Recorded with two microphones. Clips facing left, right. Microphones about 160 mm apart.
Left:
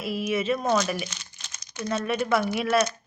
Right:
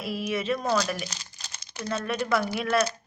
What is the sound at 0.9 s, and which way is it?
Crumpling, 35° right (ahead or behind).